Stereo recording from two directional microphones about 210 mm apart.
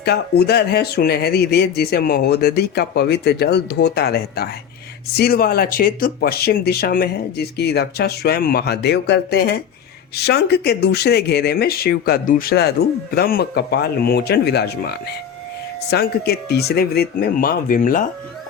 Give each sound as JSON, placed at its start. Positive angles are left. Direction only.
{"t": 0.0, "sound": "speech", "side_deg": 50}